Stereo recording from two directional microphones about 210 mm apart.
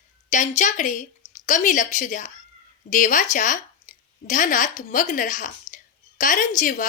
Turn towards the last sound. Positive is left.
turn(degrees=40)  # may be behind; listen again after turning